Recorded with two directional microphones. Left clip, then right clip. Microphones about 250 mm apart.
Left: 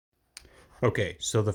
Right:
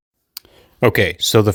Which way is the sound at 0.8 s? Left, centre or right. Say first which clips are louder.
Right 13 dB; right.